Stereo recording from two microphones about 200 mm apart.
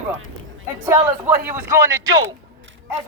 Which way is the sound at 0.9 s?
10° right (ahead or behind).